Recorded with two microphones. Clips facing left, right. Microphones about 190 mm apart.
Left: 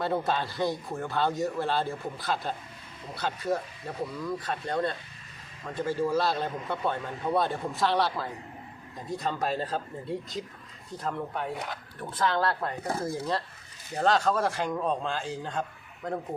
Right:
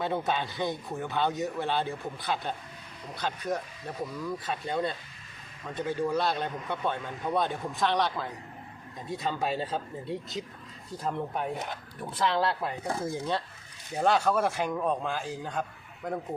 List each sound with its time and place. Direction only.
0.0 s speech: centre (ahead or behind)
11.0 s speech: 15° right (ahead or behind)
12.2 s speech: 5° right (ahead or behind)